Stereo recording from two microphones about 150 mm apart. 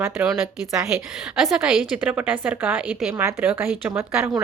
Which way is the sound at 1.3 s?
5° right (ahead or behind).